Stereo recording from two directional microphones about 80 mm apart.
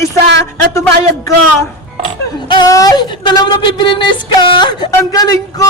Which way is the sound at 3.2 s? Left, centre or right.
Left.